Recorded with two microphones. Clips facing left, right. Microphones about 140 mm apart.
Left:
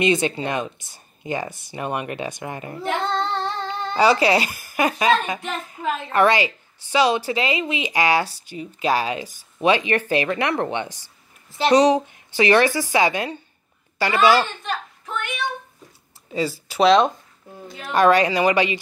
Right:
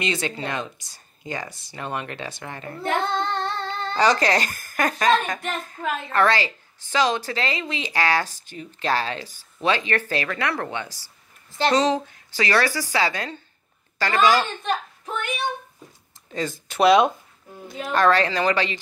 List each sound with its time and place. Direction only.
0.0 s a woman's voice: 20° left (ahead or behind)
2.9 s child singing: centre (ahead or behind)
3.6 s a woman's voice: 10° left (ahead or behind)
16.3 s speech: 5° left (ahead or behind)
17.9 s speech: 15° left (ahead or behind)